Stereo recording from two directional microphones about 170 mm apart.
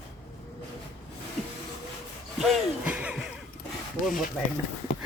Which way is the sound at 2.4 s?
Centre (ahead or behind).